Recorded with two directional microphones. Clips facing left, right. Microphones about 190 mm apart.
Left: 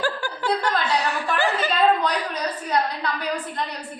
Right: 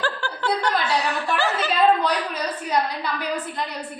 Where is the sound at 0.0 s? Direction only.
10° left (ahead or behind).